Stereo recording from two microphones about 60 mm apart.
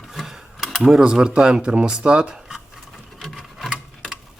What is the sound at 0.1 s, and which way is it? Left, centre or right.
Speech, centre.